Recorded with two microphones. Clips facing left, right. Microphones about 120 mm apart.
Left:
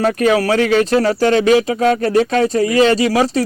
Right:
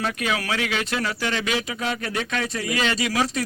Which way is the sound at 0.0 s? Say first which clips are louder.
Left 12 dB; 40° left (ahead or behind).